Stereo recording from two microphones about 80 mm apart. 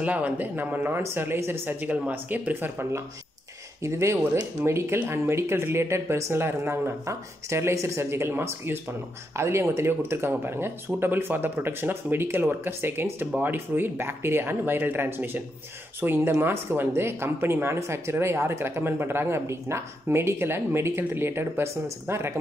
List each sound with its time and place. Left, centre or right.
0.0 s speech: centre
3.8 s speech: right